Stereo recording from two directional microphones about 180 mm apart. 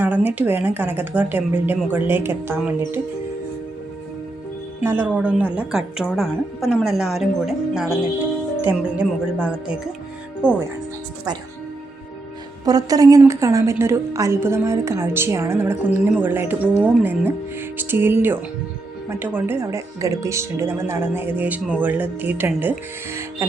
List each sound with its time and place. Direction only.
0.0 s speech: 10° right (ahead or behind)
4.8 s a woman's voice: 10° right (ahead or behind)
10.4 s speech: 5° right (ahead or behind)
12.6 s speech: 20° right (ahead or behind)